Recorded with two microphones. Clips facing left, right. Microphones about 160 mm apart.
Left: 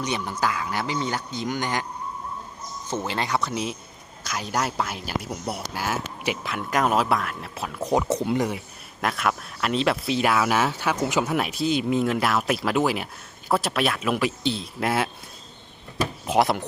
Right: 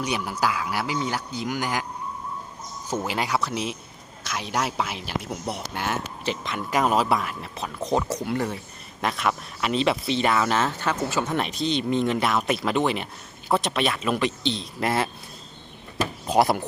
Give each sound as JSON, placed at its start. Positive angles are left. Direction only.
{"t": 0.0, "sound": "speech", "side_deg": -10}
{"t": 3.1, "sound": "speech", "side_deg": -10}
{"t": 8.0, "sound": "speech", "side_deg": 25}
{"t": 9.0, "sound": "speech", "side_deg": 0}
{"t": 16.2, "sound": "speech", "side_deg": 0}